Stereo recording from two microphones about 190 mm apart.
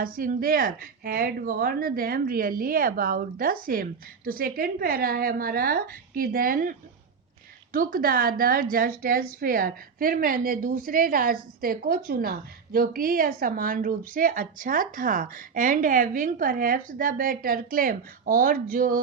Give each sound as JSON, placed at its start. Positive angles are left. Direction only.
{"t": 0.0, "sound": "a woman's voice", "side_deg": -50}